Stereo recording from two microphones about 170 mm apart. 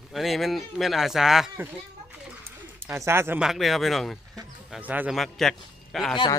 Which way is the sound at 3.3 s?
Centre (ahead or behind).